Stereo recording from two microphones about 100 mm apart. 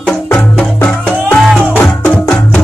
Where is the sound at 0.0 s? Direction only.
10° left (ahead or behind).